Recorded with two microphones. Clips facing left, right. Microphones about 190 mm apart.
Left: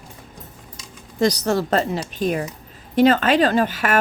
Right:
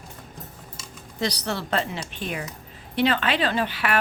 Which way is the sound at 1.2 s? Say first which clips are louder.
Left 9 dB; 45° left (ahead or behind).